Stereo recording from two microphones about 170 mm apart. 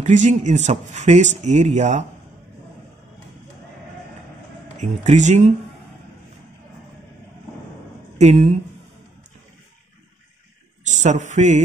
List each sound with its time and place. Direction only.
0.0 s speech: 45° right (ahead or behind)
4.7 s speech: 45° right (ahead or behind)
8.2 s speech: 40° right (ahead or behind)
10.8 s speech: 45° right (ahead or behind)